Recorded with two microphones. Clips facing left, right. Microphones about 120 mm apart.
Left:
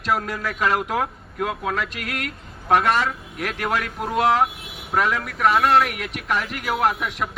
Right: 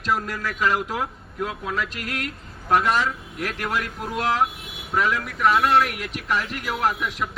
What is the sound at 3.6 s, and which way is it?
Speech, 55° left (ahead or behind).